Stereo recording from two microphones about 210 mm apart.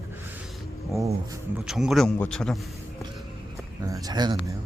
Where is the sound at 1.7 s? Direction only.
Centre (ahead or behind).